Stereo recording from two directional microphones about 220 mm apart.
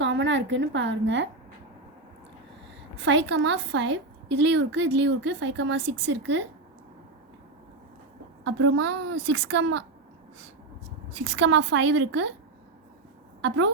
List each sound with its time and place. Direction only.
0.0 s a woman's voice: 55° right (ahead or behind)
3.0 s a woman's voice: 55° right (ahead or behind)
8.4 s a woman's voice: 60° right (ahead or behind)
11.2 s a woman's voice: 55° right (ahead or behind)